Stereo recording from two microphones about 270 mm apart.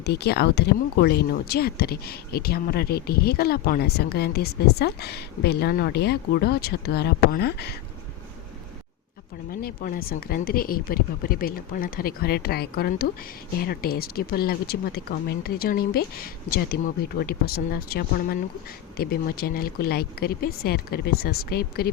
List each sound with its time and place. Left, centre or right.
0.0 s speech: left
9.5 s speech: left